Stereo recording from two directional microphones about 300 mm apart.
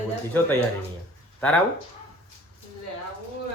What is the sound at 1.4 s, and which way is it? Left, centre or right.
Speech, centre.